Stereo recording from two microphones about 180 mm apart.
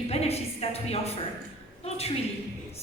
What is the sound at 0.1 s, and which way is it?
A woman's voice, 35° left (ahead or behind).